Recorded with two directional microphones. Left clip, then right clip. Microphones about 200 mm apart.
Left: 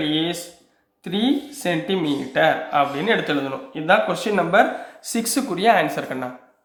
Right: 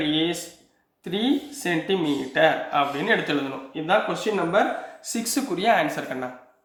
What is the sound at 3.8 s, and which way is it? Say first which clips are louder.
Speech: left 4 dB; 35° left (ahead or behind).